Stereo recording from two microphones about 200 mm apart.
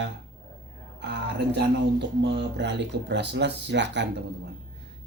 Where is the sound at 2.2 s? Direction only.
60° right (ahead or behind).